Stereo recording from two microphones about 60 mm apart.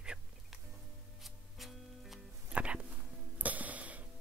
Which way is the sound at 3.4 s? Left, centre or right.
Right.